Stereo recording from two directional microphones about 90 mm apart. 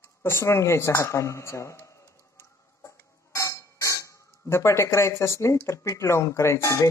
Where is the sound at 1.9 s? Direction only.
35° left (ahead or behind).